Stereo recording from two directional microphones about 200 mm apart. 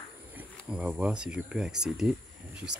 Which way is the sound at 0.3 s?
5° right (ahead or behind).